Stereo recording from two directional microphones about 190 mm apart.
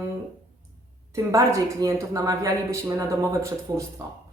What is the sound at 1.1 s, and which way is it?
Speech, 15° right (ahead or behind).